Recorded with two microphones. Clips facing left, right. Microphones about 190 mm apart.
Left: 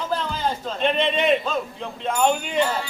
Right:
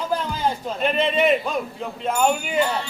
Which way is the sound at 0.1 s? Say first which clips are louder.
Right 1 dB; 10° right (ahead or behind).